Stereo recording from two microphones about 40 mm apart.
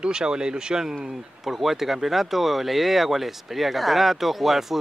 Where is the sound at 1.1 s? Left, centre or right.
Centre.